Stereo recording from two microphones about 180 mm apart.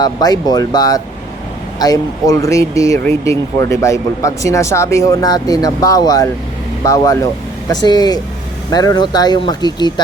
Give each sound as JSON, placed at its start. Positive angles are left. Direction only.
{"t": 0.0, "sound": "speech", "side_deg": 20}